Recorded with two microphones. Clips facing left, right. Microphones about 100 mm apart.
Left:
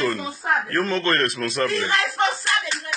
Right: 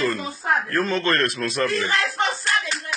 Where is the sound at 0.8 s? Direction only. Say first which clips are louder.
Even; 10° right (ahead or behind).